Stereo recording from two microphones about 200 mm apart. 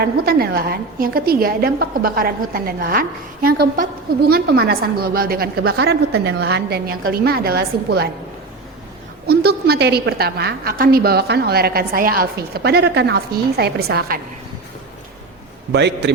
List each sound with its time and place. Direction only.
0.0 s a woman's voice: 50° right (ahead or behind)
9.2 s a woman's voice: 50° right (ahead or behind)
15.7 s a man's voice: 60° right (ahead or behind)